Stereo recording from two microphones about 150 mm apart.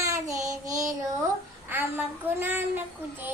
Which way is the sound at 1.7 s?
15° right (ahead or behind).